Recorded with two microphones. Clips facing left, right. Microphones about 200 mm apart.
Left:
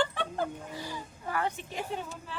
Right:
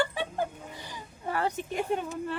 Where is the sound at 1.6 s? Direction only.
55° right (ahead or behind).